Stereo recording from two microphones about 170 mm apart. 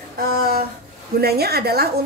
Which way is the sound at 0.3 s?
65° right (ahead or behind).